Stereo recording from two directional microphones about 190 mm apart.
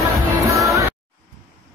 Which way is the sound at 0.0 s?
15° right (ahead or behind).